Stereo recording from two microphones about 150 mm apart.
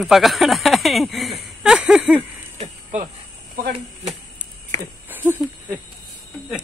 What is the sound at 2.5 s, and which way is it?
Snake, 55° right (ahead or behind).